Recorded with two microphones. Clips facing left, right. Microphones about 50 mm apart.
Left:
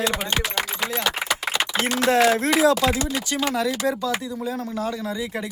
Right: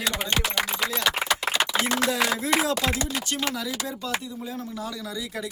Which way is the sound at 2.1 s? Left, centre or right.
Left.